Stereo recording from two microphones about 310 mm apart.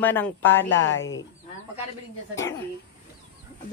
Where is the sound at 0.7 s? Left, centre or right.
Left.